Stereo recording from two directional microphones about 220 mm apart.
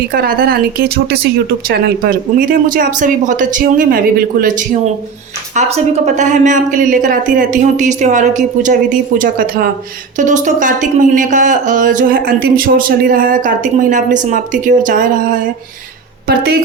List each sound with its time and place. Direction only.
0.1 s a woman's voice: 40° right (ahead or behind)